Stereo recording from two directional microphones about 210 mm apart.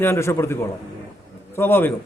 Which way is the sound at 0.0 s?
10° left (ahead or behind).